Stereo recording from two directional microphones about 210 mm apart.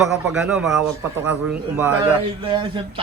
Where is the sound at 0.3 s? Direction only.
5° right (ahead or behind).